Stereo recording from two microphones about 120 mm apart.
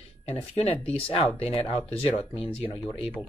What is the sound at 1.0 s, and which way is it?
Speech, 50° left (ahead or behind).